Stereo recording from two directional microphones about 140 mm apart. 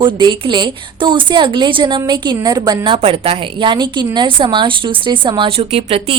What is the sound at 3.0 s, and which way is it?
A woman's voice, 40° right (ahead or behind).